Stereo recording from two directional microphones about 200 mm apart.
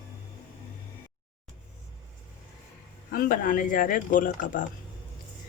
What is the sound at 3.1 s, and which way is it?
Speech, 45° left (ahead or behind).